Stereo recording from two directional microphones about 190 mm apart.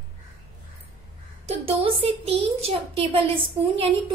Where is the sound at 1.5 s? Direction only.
30° right (ahead or behind).